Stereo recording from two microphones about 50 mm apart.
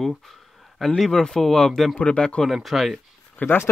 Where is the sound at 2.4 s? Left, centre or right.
Centre.